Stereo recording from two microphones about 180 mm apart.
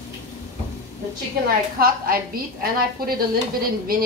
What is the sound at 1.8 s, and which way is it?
A woman's voice, 55° right (ahead or behind).